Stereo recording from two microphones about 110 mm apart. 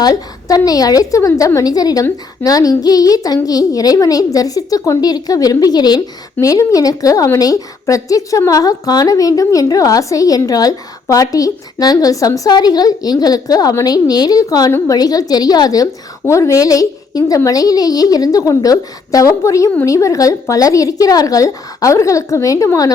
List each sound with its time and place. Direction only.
0.0 s a woman's voice: 35° left (ahead or behind)